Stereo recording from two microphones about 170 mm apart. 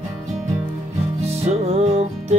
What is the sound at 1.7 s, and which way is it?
Music, 40° right (ahead or behind).